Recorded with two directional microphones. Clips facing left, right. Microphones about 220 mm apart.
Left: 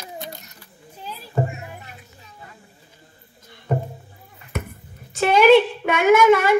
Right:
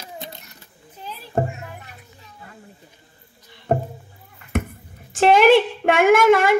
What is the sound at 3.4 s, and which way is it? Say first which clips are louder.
Music: left 2 dB; 50° left (ahead or behind).